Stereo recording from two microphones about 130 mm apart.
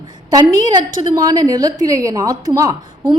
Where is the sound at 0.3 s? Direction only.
30° right (ahead or behind).